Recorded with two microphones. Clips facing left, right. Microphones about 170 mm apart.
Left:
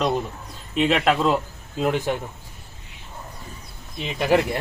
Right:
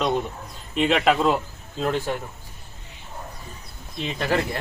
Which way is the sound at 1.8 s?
15° left (ahead or behind).